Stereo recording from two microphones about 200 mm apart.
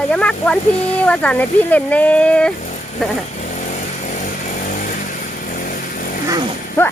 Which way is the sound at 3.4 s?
35° left (ahead or behind).